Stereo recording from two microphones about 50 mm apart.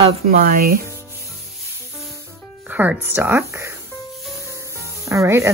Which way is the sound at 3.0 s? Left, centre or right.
Right.